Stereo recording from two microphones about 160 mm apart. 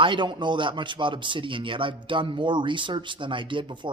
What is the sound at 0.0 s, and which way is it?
Speech, 30° right (ahead or behind).